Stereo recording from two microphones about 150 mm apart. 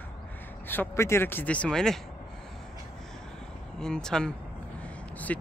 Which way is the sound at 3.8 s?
5° left (ahead or behind).